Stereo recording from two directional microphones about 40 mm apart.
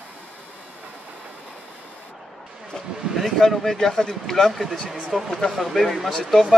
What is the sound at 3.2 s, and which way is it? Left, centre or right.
A man's voice, centre.